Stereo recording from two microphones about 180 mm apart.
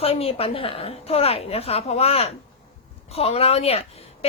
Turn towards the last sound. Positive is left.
turn(degrees=35)  # may be behind; listen again after turning